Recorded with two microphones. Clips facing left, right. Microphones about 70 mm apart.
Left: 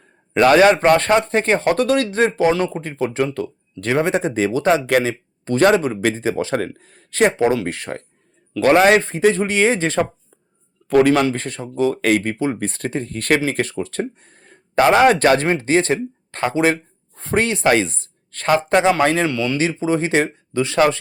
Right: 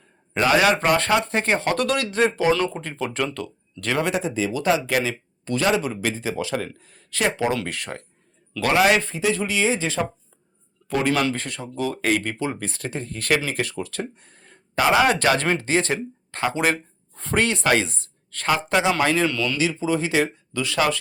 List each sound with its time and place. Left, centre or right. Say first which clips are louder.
0.3 s speech: left 6 dB; left
0.6 s speech: left 6 dB; left
2.6 s speech: left 4 dB; left
4.2 s a man's voice: left 6 dB; left
11.3 s speech: left 4 dB; left
15.4 s speech: left 5 dB; left
19.3 s speech: left 4 dB; left
19.5 s speech: left 4 dB; left